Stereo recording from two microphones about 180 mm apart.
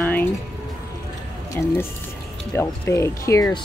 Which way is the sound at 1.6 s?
10° left (ahead or behind).